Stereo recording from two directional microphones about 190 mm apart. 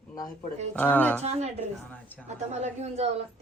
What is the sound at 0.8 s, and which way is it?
Speech, 10° left (ahead or behind).